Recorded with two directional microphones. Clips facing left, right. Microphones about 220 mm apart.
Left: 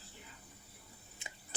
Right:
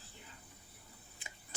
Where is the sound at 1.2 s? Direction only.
25° left (ahead or behind).